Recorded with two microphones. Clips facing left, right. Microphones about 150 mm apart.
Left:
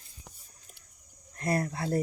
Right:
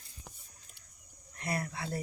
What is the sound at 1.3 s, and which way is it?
Cricket, 40° left (ahead or behind).